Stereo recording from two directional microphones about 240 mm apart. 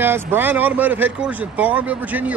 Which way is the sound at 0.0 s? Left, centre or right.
Centre.